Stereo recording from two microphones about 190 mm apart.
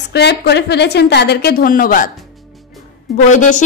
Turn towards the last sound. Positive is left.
turn(degrees=40)  # may be behind; listen again after turning